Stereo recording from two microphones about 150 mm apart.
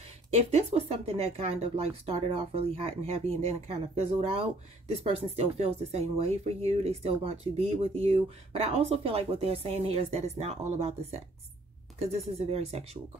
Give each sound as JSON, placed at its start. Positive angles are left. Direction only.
{"t": 0.3, "sound": "speech", "side_deg": -45}
{"t": 12.4, "sound": "speech", "side_deg": -45}